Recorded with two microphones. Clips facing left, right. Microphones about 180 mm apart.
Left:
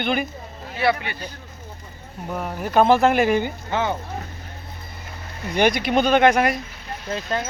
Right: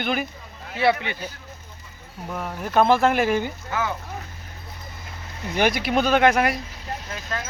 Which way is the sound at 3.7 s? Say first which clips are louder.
Left 4 dB; 25° left (ahead or behind).